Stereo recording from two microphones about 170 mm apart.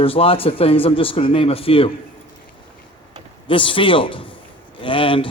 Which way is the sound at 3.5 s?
30° left (ahead or behind).